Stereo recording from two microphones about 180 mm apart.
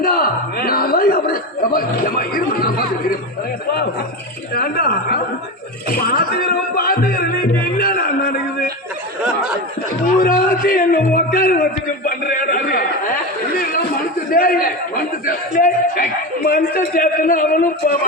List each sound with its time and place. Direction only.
0.0 s chuckle: 55° left (ahead or behind)
4.5 s speech: 60° left (ahead or behind)
6.0 s music: 55° left (ahead or behind)
10.2 s a sound: 50° left (ahead or behind)